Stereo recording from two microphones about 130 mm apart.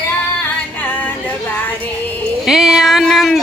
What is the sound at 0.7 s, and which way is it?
Music, 15° left (ahead or behind).